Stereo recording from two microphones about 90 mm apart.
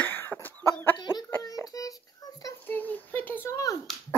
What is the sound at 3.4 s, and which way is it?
Speech, 40° left (ahead or behind).